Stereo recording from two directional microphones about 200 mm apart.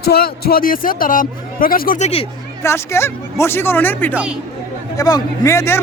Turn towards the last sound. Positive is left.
turn(degrees=15)  # may be behind; listen again after turning